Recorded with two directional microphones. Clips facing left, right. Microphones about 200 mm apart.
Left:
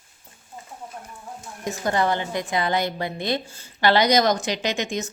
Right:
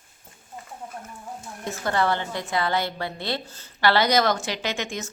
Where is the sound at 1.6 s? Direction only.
15° left (ahead or behind).